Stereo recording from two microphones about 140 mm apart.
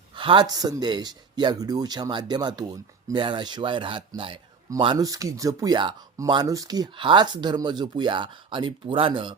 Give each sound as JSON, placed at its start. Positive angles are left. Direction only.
{"t": 0.2, "sound": "speech", "side_deg": -35}
{"t": 4.9, "sound": "speech", "side_deg": -25}